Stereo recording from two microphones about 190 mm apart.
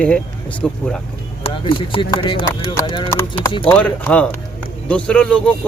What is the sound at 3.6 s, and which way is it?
Speech, 5° left (ahead or behind).